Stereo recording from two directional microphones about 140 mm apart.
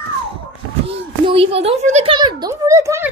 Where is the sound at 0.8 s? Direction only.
40° right (ahead or behind).